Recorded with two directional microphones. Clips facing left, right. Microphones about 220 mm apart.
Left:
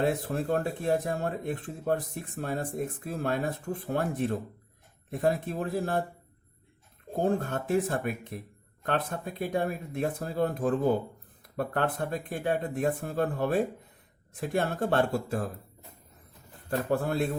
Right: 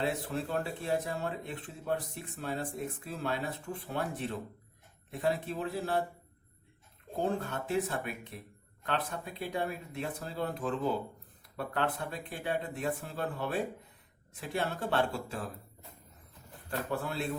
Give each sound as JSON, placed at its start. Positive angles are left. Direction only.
{"t": 0.0, "sound": "speech", "side_deg": 50}
{"t": 7.2, "sound": "speech", "side_deg": 50}
{"t": 16.6, "sound": "speech", "side_deg": 50}